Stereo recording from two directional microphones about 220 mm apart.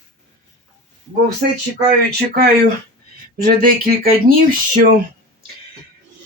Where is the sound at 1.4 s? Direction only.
40° right (ahead or behind).